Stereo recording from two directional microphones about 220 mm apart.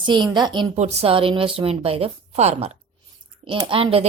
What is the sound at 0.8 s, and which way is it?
A woman's voice, 30° right (ahead or behind).